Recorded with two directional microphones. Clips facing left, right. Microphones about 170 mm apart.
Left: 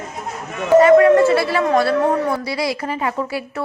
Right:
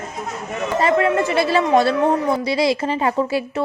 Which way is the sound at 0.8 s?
25° right (ahead or behind).